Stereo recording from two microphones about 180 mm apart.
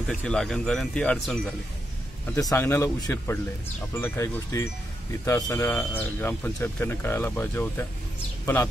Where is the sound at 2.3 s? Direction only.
15° left (ahead or behind).